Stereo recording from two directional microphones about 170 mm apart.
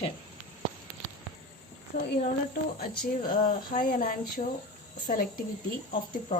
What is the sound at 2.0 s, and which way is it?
Speech, 55° left (ahead or behind).